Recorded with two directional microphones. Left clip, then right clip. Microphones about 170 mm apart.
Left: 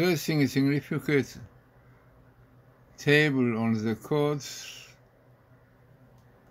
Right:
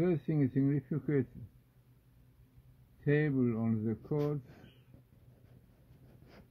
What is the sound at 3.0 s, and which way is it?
Speech, centre (ahead or behind).